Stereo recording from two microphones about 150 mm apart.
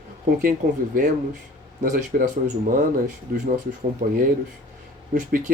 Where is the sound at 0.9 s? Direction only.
70° right (ahead or behind).